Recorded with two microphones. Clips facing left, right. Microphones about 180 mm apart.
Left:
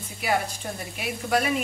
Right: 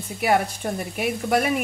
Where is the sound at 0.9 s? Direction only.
55° right (ahead or behind).